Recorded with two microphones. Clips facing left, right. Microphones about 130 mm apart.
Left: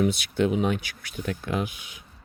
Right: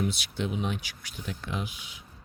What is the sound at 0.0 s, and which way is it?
Speech, 55° left (ahead or behind).